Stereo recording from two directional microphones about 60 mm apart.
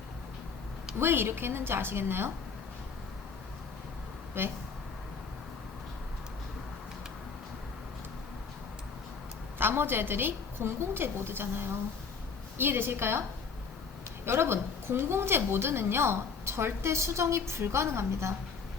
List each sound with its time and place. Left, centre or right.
0.9 s a woman's voice: right
4.4 s a woman's voice: right
9.6 s a woman's voice: right
14.3 s a woman's voice: right